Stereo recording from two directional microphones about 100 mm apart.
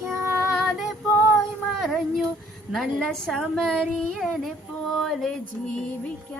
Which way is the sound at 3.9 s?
5° left (ahead or behind).